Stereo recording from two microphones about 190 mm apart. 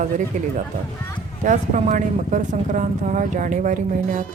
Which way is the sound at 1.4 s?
40° right (ahead or behind).